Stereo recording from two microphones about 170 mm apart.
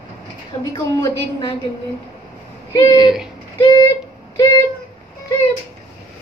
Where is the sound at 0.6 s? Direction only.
25° left (ahead or behind).